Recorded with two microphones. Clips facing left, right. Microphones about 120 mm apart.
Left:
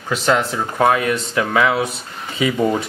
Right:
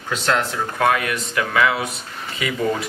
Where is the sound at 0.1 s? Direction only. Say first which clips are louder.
Left 3 dB; centre (ahead or behind).